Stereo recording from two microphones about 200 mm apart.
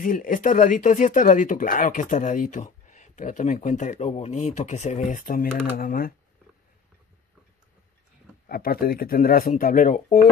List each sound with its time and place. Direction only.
0.0 s speech: 45° left (ahead or behind)
8.5 s speech: 50° left (ahead or behind)